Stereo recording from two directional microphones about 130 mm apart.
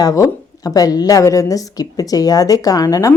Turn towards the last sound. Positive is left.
turn(degrees=25)  # may be behind; listen again after turning